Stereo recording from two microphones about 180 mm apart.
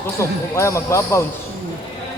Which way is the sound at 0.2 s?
15° left (ahead or behind).